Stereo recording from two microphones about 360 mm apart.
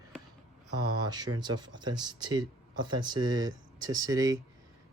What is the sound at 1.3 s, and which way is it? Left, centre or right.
Speech, right.